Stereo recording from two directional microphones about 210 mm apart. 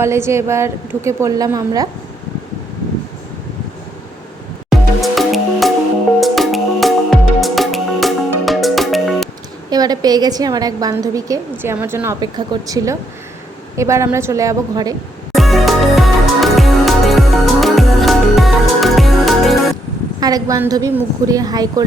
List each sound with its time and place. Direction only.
0.0 s a woman's voice: 10° right (ahead or behind)
4.7 s music: centre (ahead or behind)
9.6 s a woman's voice: 20° right (ahead or behind)
15.4 s music: centre (ahead or behind)
20.1 s a woman's voice: 20° right (ahead or behind)